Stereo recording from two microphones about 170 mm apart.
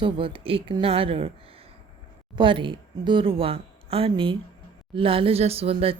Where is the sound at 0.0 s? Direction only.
30° right (ahead or behind).